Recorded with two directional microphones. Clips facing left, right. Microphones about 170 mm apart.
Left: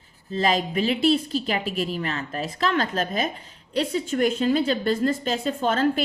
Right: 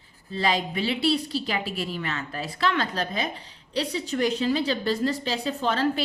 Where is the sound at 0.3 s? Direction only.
45° left (ahead or behind).